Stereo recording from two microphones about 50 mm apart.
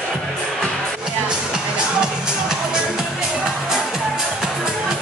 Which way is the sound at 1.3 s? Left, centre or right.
Centre.